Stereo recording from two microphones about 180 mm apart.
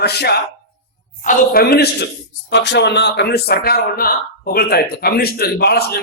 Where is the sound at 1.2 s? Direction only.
55° left (ahead or behind).